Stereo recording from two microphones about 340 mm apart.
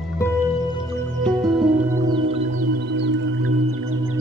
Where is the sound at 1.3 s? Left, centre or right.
Centre.